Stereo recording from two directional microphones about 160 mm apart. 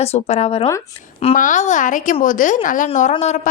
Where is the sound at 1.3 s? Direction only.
55° left (ahead or behind).